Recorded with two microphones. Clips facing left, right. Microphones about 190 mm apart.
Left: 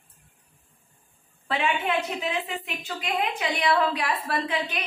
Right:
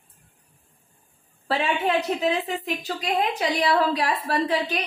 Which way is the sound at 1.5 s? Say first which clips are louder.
Right 3 dB; 35° right (ahead or behind).